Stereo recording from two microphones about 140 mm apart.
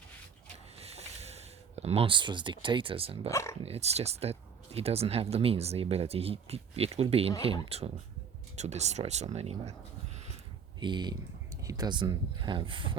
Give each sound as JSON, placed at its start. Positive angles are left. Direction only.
{"t": 0.8, "sound": "a sound", "side_deg": -50}
{"t": 3.2, "sound": "speech", "side_deg": 20}
{"t": 3.6, "sound": "speech", "side_deg": -50}
{"t": 10.8, "sound": "speech", "side_deg": -35}